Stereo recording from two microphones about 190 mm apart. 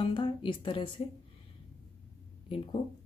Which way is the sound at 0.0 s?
25° left (ahead or behind).